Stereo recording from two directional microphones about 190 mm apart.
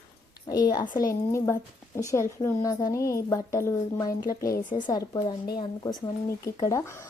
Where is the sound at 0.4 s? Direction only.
20° left (ahead or behind).